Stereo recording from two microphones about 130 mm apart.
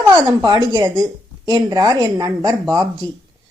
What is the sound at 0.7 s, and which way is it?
Speech, 30° right (ahead or behind).